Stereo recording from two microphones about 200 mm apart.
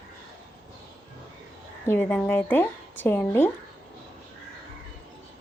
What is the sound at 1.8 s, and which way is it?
A woman's voice, 10° left (ahead or behind).